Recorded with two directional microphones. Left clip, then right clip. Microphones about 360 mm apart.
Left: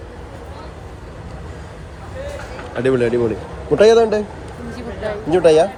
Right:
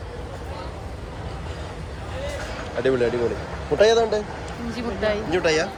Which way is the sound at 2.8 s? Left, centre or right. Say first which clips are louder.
Left 5 dB; centre.